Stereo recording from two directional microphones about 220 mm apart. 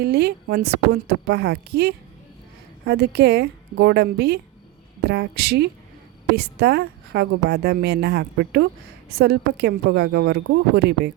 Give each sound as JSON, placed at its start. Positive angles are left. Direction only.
{"t": 0.0, "sound": "a woman's voice", "side_deg": -50}